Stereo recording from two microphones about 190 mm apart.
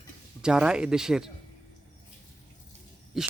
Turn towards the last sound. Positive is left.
turn(degrees=0)  # may be behind; listen again after turning